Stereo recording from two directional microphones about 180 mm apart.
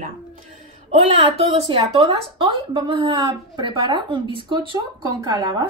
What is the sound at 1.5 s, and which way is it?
A woman's voice, 30° right (ahead or behind).